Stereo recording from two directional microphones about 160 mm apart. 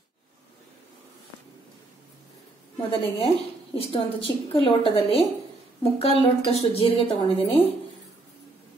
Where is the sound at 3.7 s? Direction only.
35° left (ahead or behind).